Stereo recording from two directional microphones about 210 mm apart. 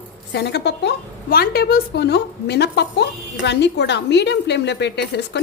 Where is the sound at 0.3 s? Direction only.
55° left (ahead or behind).